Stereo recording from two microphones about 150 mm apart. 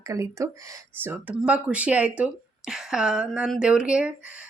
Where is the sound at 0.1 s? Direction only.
20° right (ahead or behind).